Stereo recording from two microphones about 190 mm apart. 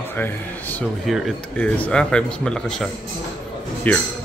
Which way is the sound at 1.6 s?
5° left (ahead or behind).